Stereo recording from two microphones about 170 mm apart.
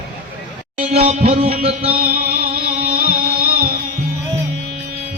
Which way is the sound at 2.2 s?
65° right (ahead or behind).